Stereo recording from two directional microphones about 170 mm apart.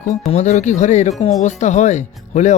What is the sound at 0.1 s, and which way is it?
Speech, 45° left (ahead or behind).